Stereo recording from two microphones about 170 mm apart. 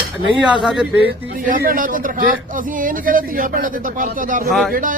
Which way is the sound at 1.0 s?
55° right (ahead or behind).